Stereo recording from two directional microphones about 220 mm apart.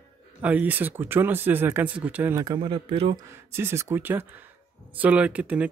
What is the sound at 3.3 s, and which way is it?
Speech, 10° right (ahead or behind).